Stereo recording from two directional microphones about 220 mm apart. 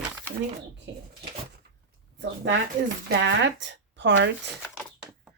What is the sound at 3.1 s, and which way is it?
Speech, 55° right (ahead or behind).